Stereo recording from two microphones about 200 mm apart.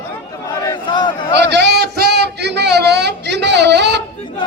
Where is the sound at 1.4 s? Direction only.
60° right (ahead or behind).